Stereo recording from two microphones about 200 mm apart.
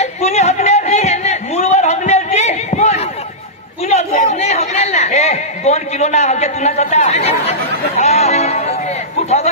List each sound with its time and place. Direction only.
0.0 s a sound: 35° left (ahead or behind)
3.9 s chatter: 35° left (ahead or behind)
8.0 s music: 35° left (ahead or behind)